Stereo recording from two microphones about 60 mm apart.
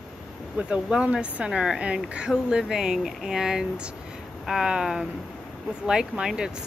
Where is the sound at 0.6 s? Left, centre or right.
Centre.